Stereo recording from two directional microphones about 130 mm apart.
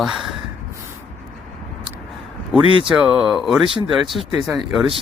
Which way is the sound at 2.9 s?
5° right (ahead or behind).